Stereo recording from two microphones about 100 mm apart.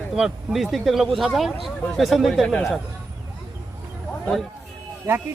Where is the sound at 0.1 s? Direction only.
Centre (ahead or behind).